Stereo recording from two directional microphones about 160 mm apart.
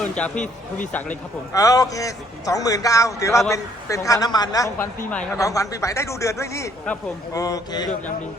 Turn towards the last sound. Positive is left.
turn(degrees=25)  # may be behind; listen again after turning